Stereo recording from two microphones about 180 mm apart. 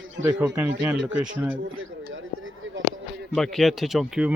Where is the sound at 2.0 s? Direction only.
90° right.